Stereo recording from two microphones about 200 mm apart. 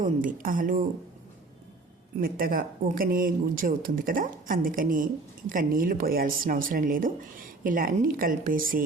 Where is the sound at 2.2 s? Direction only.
45° right (ahead or behind).